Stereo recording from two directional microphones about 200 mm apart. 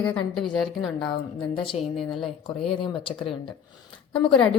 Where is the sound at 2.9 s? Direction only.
25° left (ahead or behind).